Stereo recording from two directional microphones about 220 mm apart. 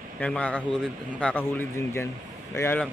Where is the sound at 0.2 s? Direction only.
5° left (ahead or behind).